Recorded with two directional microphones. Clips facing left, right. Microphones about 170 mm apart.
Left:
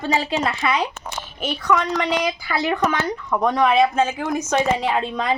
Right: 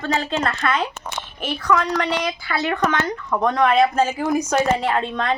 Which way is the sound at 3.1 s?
5° left (ahead or behind).